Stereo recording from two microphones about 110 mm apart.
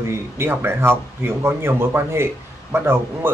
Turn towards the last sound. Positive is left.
turn(degrees=-20)  # may be behind; listen again after turning